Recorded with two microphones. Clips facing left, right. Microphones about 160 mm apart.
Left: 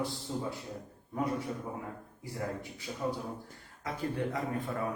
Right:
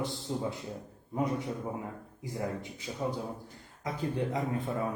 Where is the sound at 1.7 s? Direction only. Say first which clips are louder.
Right 2 dB; 20° right (ahead or behind).